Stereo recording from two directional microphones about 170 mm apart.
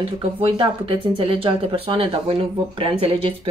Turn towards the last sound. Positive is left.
turn(degrees=-30)  # may be behind; listen again after turning